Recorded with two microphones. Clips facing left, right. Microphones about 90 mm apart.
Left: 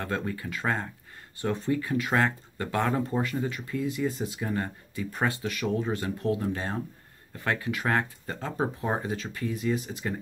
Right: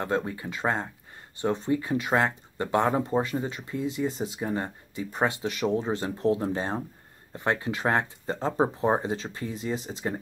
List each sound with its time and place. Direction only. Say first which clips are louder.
0.0 s speech: right 3 dB; 20° right (ahead or behind)